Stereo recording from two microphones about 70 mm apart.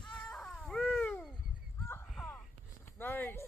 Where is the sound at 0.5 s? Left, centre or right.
Centre.